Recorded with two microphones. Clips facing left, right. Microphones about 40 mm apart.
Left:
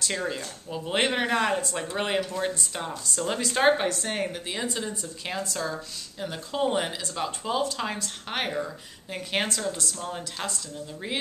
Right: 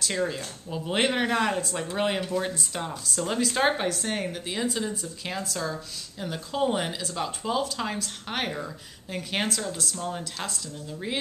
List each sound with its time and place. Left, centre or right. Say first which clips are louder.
0.0 s a woman's voice: right 1 dB; centre